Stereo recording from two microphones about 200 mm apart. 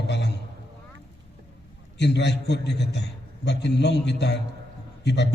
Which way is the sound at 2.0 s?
60° left (ahead or behind).